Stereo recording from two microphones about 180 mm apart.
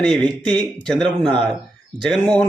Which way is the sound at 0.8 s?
5° left (ahead or behind).